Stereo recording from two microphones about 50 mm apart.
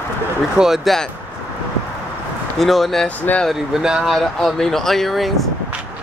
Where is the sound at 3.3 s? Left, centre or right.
Left.